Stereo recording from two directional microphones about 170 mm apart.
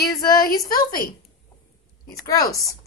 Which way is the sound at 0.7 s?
60° left (ahead or behind).